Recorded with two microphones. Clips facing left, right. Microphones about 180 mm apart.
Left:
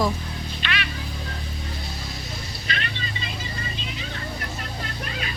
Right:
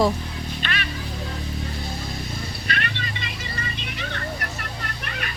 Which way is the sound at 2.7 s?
60° right (ahead or behind).